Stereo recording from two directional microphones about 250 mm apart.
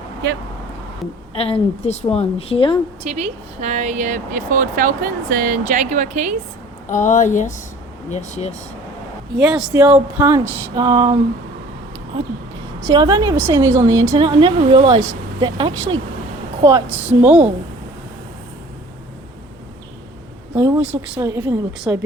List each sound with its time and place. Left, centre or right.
1.4 s a woman's voice: left
3.0 s speech: right
6.8 s a woman's voice: left
9.4 s speech: centre
20.6 s speech: centre